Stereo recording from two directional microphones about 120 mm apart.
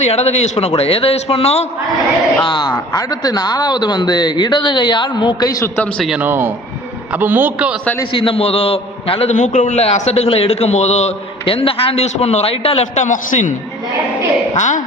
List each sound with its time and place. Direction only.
0.0 s a man's voice: 65° left (ahead or behind)
0.8 s a man's voice: 50° left (ahead or behind)
2.4 s a man's voice: 40° left (ahead or behind)
6.0 s speech: 5° right (ahead or behind)
6.2 s a man's voice: 20° right (ahead or behind)
8.1 s a man's voice: 45° left (ahead or behind)
9.3 s a man's voice: 90° left; by 11.1 s 70° left (ahead or behind)
11.4 s a man's voice: 50° left (ahead or behind); by 13.5 s 90° left
14.5 s a woman's voice: 90° left